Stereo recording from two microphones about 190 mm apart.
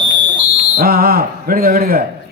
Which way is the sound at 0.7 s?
50° right (ahead or behind).